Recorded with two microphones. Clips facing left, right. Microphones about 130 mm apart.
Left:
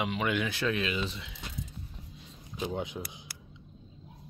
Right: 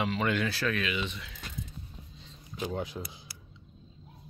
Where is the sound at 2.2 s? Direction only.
15° left (ahead or behind).